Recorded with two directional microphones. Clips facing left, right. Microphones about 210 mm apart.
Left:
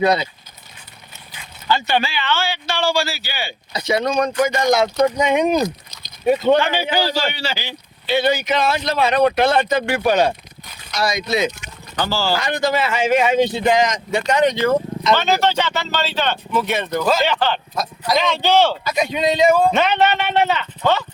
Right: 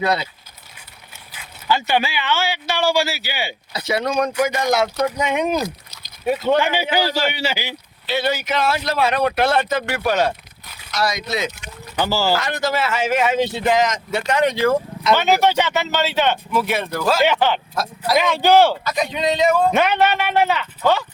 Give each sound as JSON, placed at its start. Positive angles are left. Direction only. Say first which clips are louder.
{"t": 1.3, "sound": "speech", "louder": "even", "side_deg": -10}
{"t": 8.0, "sound": "speech", "louder": "left 4 dB", "side_deg": -5}
{"t": 9.8, "sound": "speech", "louder": "left 3 dB", "side_deg": 20}
{"t": 10.2, "sound": "a sound", "louder": "left 2 dB", "side_deg": -5}
{"t": 10.9, "sound": "speech", "louder": "left 2 dB", "side_deg": 20}
{"t": 11.9, "sound": "speech", "louder": "right 1 dB", "side_deg": -10}
{"t": 18.9, "sound": "speech", "louder": "left 4 dB", "side_deg": 20}
{"t": 19.7, "sound": "speech", "louder": "even", "side_deg": -10}